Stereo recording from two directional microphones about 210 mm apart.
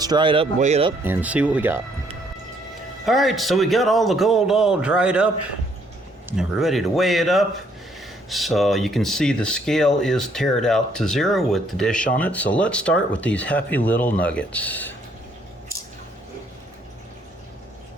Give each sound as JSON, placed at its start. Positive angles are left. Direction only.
{"t": 0.0, "sound": "speech", "side_deg": -20}
{"t": 1.0, "sound": "speech", "side_deg": -10}
{"t": 3.1, "sound": "speech", "side_deg": 0}
{"t": 6.3, "sound": "speech", "side_deg": 0}